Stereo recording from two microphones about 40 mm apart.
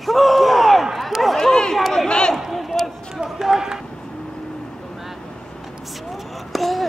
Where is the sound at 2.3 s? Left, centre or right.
Centre.